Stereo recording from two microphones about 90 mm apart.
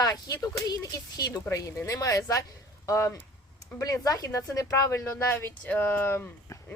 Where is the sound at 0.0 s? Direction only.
40° left (ahead or behind).